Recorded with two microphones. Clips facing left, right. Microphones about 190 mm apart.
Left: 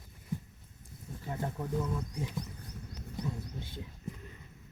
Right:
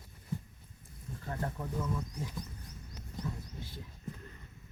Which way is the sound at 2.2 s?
65° left (ahead or behind).